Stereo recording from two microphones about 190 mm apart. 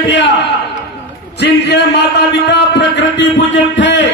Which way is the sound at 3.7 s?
70° left (ahead or behind).